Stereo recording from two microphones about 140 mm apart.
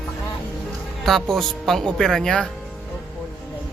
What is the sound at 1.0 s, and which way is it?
A man's voice, centre (ahead or behind).